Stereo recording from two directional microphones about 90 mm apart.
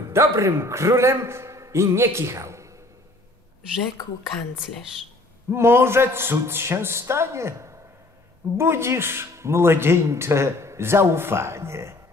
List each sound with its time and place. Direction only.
0.1 s a man's voice: 35° right (ahead or behind)
5.5 s speech: 30° right (ahead or behind)